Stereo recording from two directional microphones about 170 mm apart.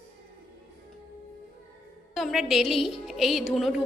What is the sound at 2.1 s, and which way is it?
A woman's voice, centre (ahead or behind).